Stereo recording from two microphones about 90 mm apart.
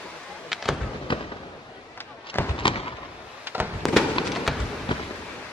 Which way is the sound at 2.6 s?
75° left (ahead or behind).